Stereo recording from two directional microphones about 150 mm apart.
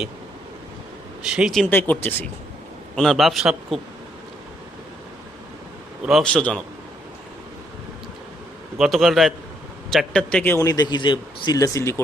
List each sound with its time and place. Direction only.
1.2 s a man's voice: 5° right (ahead or behind)
1.7 s a man's voice: 10° left (ahead or behind); by 3.8 s 5° right (ahead or behind)
6.0 s a man's voice: centre (ahead or behind)
8.8 s a man's voice: centre (ahead or behind)
10.6 s speech: 25° left (ahead or behind)